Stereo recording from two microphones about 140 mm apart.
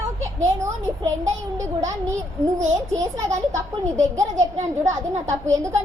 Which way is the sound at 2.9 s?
25° right (ahead or behind).